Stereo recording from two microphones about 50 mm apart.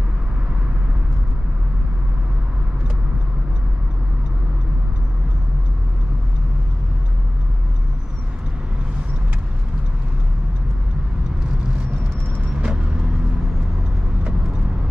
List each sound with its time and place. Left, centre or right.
12.5 s vehicle: right